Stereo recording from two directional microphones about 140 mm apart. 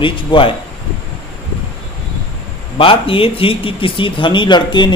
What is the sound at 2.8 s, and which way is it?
Speech, 40° left (ahead or behind).